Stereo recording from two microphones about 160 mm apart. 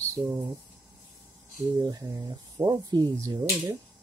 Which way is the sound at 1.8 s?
20° right (ahead or behind).